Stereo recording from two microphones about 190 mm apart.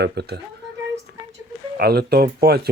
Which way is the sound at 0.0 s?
60° right (ahead or behind).